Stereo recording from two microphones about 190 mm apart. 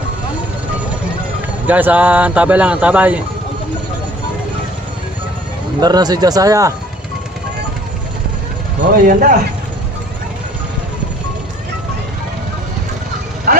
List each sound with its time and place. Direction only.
1.6 s speech: 10° right (ahead or behind)
5.8 s speech: 20° right (ahead or behind)
8.9 s speech: 50° right (ahead or behind)
13.5 s vehicle: 50° right (ahead or behind)